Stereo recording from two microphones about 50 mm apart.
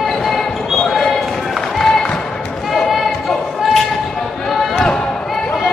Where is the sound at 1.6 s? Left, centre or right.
Centre.